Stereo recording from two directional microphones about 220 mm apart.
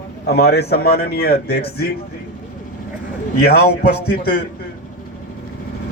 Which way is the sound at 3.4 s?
45° left (ahead or behind).